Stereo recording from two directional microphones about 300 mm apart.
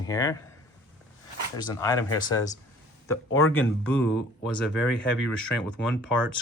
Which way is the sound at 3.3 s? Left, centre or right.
Left.